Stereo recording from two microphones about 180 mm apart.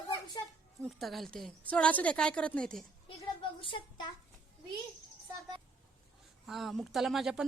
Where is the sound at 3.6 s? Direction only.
30° left (ahead or behind).